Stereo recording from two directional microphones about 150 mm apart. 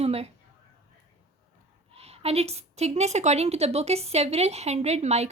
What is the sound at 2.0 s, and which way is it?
A woman's voice, 45° right (ahead or behind).